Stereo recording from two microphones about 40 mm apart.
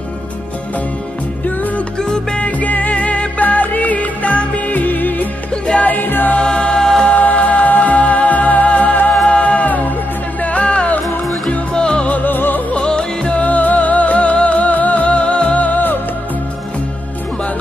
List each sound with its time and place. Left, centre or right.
2.0 s music: centre
2.4 s music: left
4.7 s music: left
5.5 s music: left
5.9 s music: left
6.4 s music: left
7.2 s music: left
10.6 s music: left
12.3 s music: left
12.7 s music: left
13.4 s music: left
15.5 s music: left